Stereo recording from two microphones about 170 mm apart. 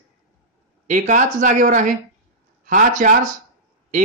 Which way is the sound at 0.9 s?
45° right (ahead or behind).